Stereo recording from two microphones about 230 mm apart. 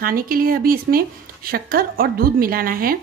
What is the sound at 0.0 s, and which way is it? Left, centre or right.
Speech, right.